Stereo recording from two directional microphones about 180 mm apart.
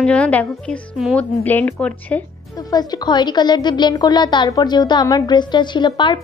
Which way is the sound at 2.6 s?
20° left (ahead or behind).